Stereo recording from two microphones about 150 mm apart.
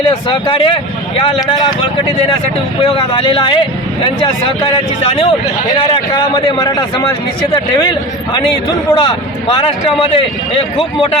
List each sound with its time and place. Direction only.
0.3 s speech: 35° left (ahead or behind)
2.8 s speech: 35° left (ahead or behind)
9.0 s speech: 35° left (ahead or behind)